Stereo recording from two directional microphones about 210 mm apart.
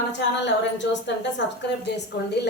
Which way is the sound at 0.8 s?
60° left (ahead or behind).